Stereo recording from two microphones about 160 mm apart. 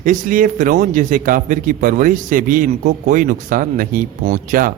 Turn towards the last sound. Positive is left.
turn(degrees=-60)  # may be behind; listen again after turning